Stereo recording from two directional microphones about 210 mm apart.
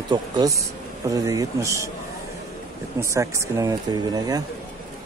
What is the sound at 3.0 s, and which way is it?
Speech, 15° right (ahead or behind).